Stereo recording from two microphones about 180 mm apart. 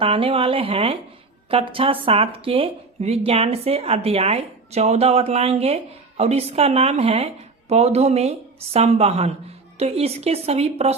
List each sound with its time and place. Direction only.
0.0 s speech: 30° right (ahead or behind)